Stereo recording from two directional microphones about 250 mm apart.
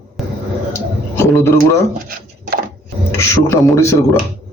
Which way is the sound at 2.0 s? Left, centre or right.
Right.